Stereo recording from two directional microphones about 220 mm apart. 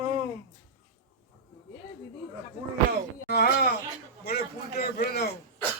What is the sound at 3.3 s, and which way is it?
A man's voice, 45° left (ahead or behind).